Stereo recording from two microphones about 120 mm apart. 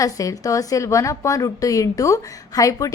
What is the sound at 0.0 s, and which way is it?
A woman's voice, 30° left (ahead or behind).